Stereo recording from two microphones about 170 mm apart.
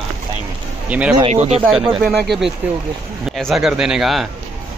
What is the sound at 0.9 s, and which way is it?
Speech, 10° right (ahead or behind).